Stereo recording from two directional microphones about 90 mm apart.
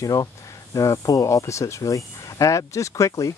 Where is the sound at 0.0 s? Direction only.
40° left (ahead or behind).